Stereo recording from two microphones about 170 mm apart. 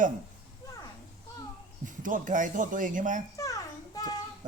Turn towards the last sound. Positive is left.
turn(degrees=20)  # may be behind; listen again after turning